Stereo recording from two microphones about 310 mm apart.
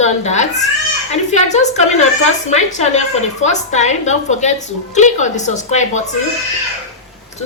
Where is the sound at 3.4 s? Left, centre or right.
Left.